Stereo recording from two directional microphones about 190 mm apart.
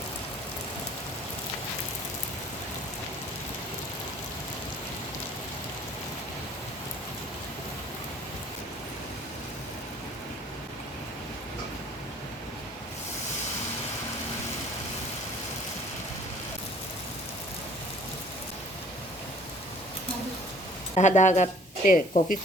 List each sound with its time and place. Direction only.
20.9 s a woman's voice: 40° left (ahead or behind)